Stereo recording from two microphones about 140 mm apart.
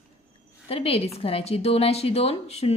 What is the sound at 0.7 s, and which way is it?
A woman's voice, 45° left (ahead or behind).